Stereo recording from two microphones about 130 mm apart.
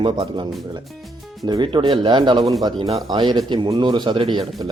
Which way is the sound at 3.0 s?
35° right (ahead or behind).